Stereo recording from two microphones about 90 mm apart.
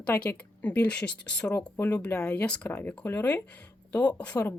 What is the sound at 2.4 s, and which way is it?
Speech, 15° left (ahead or behind).